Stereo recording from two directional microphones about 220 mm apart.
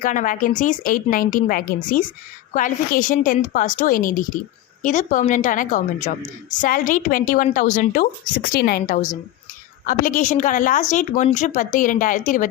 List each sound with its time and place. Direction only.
0.0 s a woman's voice: 35° left (ahead or behind)